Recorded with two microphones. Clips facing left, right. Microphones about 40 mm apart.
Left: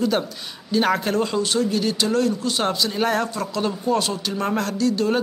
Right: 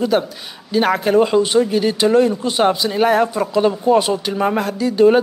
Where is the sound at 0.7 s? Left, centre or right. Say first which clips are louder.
Right 4 dB; centre.